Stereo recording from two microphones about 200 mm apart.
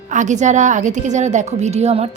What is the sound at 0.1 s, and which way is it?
A woman's voice, 40° right (ahead or behind).